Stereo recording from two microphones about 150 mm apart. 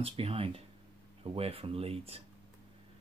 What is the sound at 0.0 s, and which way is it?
Speech, 40° right (ahead or behind).